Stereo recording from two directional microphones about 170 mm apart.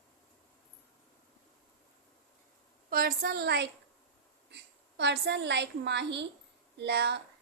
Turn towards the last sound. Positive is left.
turn(degrees=-85)